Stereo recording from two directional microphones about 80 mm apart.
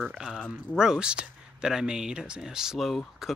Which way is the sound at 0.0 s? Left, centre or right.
Centre.